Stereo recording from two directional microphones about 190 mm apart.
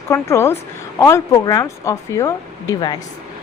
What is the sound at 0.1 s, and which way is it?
Speech, 15° left (ahead or behind).